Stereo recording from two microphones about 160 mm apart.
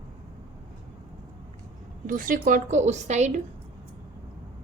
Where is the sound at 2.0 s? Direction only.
60° right (ahead or behind).